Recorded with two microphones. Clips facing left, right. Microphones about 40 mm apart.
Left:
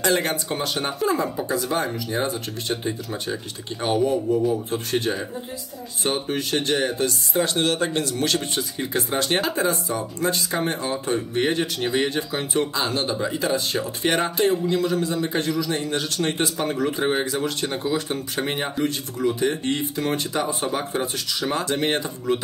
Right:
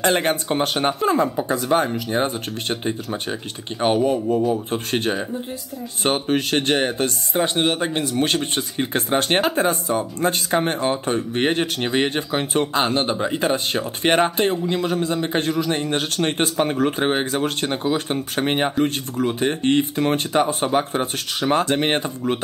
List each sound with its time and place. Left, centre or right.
0.0 s speech: right